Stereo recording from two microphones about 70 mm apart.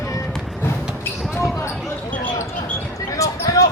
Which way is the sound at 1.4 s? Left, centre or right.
Left.